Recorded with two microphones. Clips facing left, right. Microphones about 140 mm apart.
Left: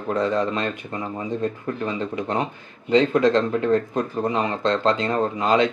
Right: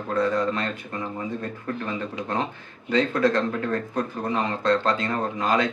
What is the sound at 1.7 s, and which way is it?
Speech, 20° left (ahead or behind).